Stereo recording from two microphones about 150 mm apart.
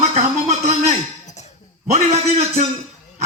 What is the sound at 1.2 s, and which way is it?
Dog, 50° left (ahead or behind).